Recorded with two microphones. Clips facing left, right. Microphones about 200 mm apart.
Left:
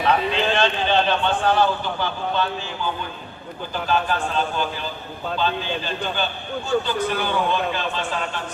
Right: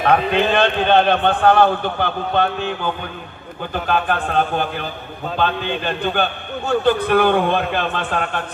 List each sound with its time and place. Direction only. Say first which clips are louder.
0.0 s a man's voice: right 4 dB; 55° right (ahead or behind)